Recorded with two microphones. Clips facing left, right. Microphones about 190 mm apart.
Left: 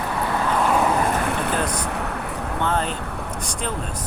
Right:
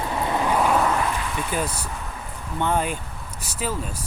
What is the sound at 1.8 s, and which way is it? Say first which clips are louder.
Vehicle: left 8 dB; 70° left (ahead or behind).